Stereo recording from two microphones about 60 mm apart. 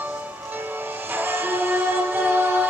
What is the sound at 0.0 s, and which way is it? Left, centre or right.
Music, right.